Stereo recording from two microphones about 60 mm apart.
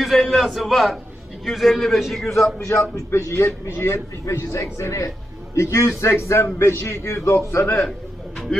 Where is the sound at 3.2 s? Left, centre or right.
Left.